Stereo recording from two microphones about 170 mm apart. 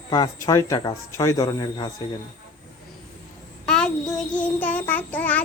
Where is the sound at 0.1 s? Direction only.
20° left (ahead or behind).